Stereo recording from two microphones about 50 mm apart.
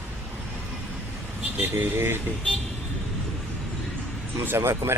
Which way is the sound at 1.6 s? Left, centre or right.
Right.